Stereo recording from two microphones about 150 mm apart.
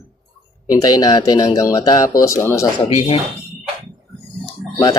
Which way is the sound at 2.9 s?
40° left (ahead or behind).